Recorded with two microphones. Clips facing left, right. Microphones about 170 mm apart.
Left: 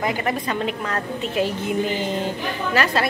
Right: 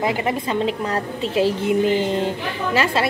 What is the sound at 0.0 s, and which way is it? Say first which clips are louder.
A woman's voice: right 2 dB; 25° right (ahead or behind).